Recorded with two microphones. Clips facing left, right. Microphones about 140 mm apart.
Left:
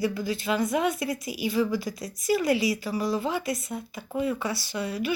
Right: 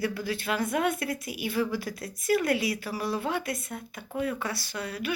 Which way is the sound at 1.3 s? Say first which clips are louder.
Left 4 dB; 55° right (ahead or behind).